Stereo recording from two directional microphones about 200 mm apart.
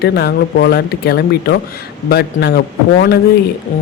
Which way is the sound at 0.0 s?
55° left (ahead or behind).